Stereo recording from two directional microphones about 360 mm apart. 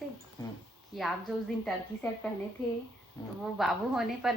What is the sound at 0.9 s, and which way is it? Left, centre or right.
Speech, centre.